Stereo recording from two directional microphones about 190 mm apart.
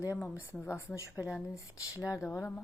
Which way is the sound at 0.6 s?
15° left (ahead or behind).